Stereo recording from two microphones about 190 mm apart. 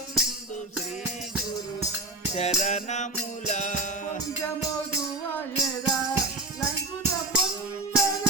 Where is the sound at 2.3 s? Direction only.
35° left (ahead or behind).